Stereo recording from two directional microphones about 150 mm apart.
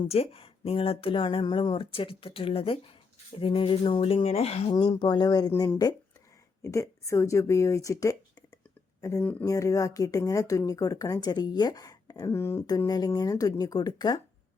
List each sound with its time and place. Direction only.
0.0 s speech: 40° left (ahead or behind)
4.9 s speech: 30° left (ahead or behind)